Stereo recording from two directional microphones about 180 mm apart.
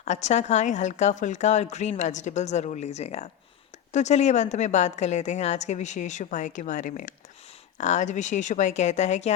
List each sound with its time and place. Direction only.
0.0 s speech: 40° left (ahead or behind)